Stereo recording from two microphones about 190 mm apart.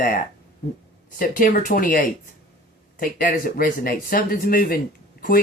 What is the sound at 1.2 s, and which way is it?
Speech, 45° left (ahead or behind).